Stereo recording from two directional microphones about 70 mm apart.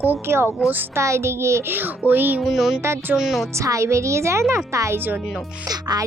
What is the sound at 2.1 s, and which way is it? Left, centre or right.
Speech, right.